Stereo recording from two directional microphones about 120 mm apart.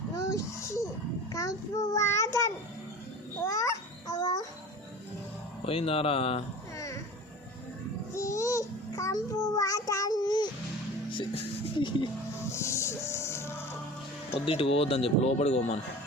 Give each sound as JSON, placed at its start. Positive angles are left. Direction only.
{"t": 0.3, "sound": "a sound", "side_deg": 25}
{"t": 1.3, "sound": "child singing", "side_deg": 25}
{"t": 3.4, "sound": "babbling", "side_deg": 25}
{"t": 5.6, "sound": "speech", "side_deg": 50}
{"t": 6.7, "sound": "music", "side_deg": 25}
{"t": 8.1, "sound": "child singing", "side_deg": 25}
{"t": 11.8, "sound": "speech", "side_deg": 45}
{"t": 12.5, "sound": "music", "side_deg": 25}
{"t": 14.3, "sound": "speech", "side_deg": 55}